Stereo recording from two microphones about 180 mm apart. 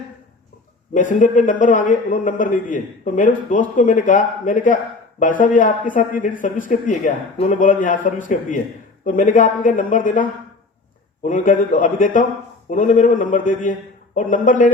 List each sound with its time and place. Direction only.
0.9 s a man's voice: 45° left (ahead or behind)